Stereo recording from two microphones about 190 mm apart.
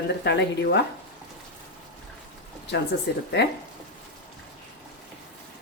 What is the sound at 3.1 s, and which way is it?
Speech, 60° left (ahead or behind).